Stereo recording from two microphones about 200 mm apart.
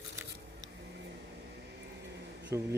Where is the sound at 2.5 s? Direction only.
10° right (ahead or behind).